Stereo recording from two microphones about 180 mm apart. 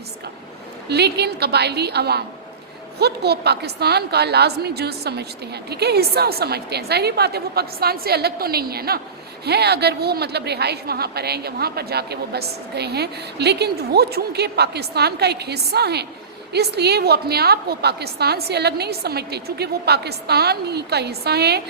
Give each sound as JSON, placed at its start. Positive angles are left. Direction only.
{"t": 0.9, "sound": "a woman's voice", "side_deg": -65}